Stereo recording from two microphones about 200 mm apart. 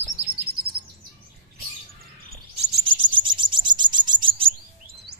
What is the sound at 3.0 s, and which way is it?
Cricket, 25° right (ahead or behind).